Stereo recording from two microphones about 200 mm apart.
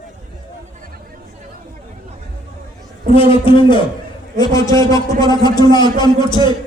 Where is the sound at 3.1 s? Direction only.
25° left (ahead or behind).